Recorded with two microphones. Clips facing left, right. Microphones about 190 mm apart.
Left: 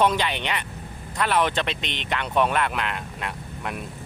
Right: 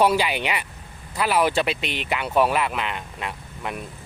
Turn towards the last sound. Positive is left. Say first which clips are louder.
# even
turn(degrees=0)  # may be behind; listen again after turning